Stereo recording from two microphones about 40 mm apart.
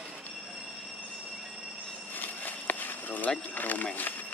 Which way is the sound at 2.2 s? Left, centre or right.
Left.